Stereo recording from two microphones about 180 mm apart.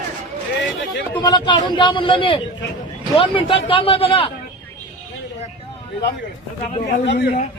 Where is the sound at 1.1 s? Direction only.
25° left (ahead or behind).